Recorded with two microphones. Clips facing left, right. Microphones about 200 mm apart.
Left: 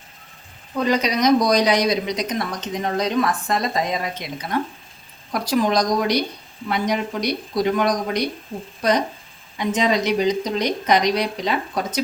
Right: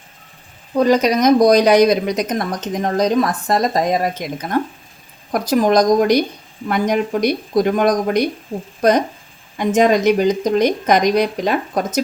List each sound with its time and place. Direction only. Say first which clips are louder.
0.8 s speech: right 6 dB; 45° right (ahead or behind)
9.6 s speech: right 6 dB; 50° right (ahead or behind)